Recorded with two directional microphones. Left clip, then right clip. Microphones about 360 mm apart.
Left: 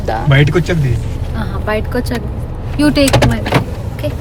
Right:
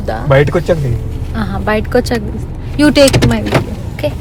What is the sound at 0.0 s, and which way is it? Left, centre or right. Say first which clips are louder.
Speech: left 2 dB; centre.